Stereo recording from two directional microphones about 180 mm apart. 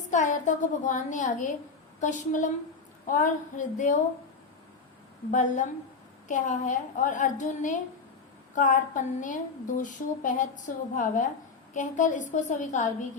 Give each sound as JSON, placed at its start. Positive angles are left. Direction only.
{"t": 0.1, "sound": "a woman's voice", "side_deg": 45}
{"t": 5.3, "sound": "a woman's voice", "side_deg": 45}